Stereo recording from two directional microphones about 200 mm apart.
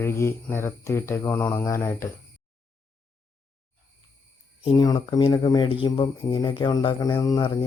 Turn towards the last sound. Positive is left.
turn(degrees=25)  # may be behind; listen again after turning